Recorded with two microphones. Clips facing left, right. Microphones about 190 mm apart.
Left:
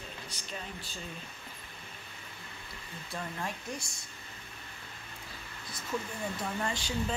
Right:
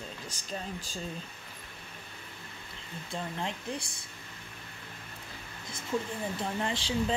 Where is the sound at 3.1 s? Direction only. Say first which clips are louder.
Right 2 dB; 25° right (ahead or behind).